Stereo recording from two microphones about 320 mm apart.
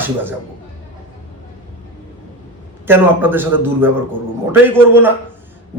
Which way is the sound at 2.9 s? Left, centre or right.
Centre.